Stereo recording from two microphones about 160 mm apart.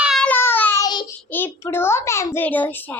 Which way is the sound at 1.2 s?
15° left (ahead or behind).